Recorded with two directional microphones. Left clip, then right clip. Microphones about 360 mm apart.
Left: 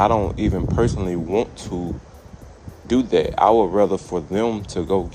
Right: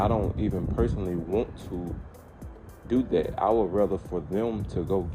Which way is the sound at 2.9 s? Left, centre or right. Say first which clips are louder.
Left 7 dB; left.